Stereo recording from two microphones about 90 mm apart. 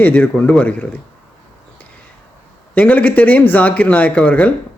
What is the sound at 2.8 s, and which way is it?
Speech, 15° left (ahead or behind).